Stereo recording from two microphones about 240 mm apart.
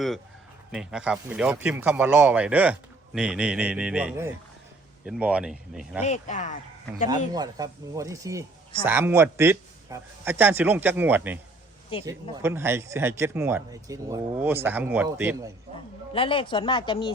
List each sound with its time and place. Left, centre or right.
0.7 s speech: centre
6.0 s speech: left
7.3 s speech: centre
11.9 s speech: left
12.4 s speech: centre
16.1 s speech: left